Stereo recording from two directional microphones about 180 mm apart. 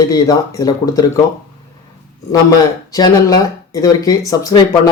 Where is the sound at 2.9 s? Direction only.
20° left (ahead or behind).